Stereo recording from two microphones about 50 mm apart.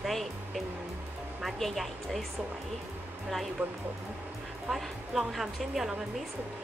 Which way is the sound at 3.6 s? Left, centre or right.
Right.